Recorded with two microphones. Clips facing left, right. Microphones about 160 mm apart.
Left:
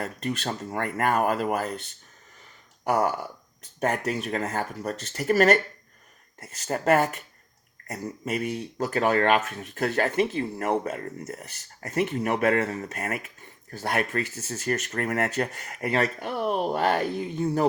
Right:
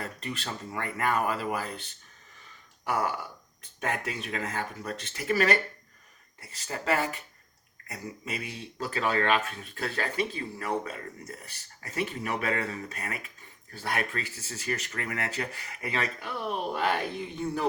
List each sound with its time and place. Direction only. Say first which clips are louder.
0.0 s speech: left 6 dB; 50° left (ahead or behind)
2.8 s speech: left 6 dB; 45° left (ahead or behind)